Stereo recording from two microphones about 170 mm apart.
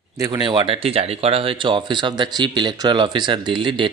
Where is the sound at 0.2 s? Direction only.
25° right (ahead or behind).